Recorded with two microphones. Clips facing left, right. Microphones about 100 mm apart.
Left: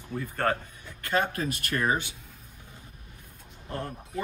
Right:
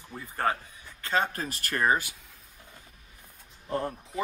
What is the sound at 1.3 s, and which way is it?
Speech, 40° right (ahead or behind).